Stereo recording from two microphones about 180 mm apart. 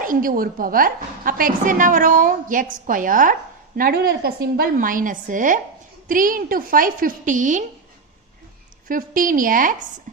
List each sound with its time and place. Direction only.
0.0 s a woman's voice: 50° right (ahead or behind)
8.9 s a woman's voice: 50° right (ahead or behind)